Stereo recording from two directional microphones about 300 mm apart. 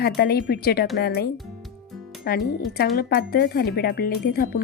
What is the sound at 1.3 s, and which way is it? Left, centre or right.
Music, centre.